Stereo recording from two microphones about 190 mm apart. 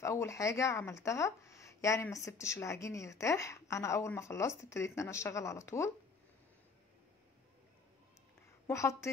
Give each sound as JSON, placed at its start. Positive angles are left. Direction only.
{"t": 0.0, "sound": "speech", "side_deg": 15}
{"t": 8.6, "sound": "speech", "side_deg": 15}